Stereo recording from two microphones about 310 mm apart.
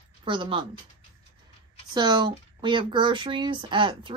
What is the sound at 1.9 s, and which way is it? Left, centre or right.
Speech, centre.